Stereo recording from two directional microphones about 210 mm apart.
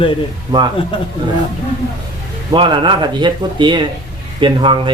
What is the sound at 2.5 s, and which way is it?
A man's voice, 20° right (ahead or behind).